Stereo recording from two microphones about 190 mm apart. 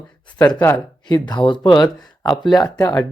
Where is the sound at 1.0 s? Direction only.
20° left (ahead or behind).